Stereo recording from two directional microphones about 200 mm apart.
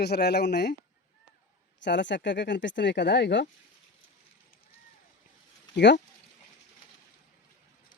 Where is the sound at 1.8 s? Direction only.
60° left (ahead or behind).